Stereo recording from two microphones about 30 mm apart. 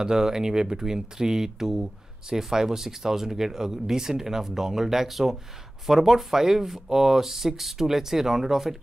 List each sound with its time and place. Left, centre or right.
0.0 s speech: centre